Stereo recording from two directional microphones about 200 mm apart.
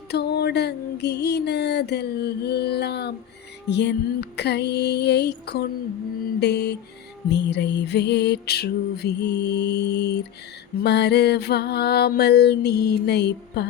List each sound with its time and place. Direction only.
0.1 s music: 55° left (ahead or behind)